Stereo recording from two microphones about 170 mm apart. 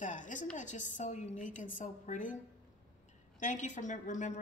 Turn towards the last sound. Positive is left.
turn(degrees=45)  # may be behind; listen again after turning